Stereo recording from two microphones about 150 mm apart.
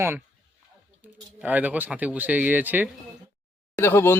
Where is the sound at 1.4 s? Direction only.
10° right (ahead or behind).